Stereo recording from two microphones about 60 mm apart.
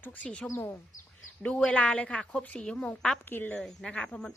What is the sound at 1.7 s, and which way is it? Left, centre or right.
Speech, left.